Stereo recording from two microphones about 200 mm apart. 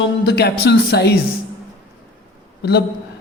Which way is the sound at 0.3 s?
55° left (ahead or behind).